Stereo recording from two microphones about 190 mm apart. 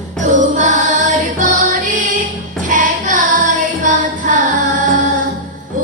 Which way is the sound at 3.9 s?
45° right (ahead or behind).